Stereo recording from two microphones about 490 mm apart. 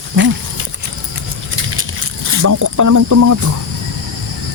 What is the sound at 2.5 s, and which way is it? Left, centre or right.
Speech, right.